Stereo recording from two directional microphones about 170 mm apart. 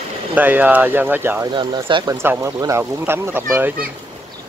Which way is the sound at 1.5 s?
30° right (ahead or behind).